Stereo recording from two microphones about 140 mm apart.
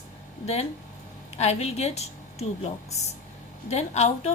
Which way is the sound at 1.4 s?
50° left (ahead or behind).